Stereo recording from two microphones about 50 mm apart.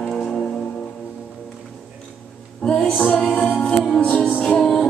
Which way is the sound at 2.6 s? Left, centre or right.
Left.